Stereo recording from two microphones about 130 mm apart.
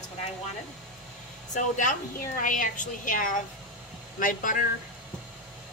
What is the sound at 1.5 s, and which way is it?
Speech, 70° left (ahead or behind).